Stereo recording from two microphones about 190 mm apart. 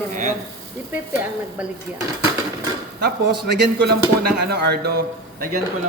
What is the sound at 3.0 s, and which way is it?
A man's voice, 60° right (ahead or behind).